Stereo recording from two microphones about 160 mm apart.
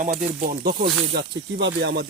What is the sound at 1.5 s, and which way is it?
Speech, 90° right.